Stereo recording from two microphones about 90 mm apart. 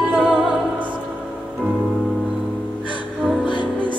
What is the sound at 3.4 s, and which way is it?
Music, 60° left (ahead or behind).